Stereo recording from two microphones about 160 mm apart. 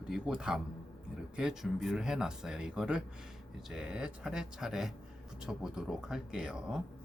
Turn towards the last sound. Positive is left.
turn(degrees=-5)  # may be behind; listen again after turning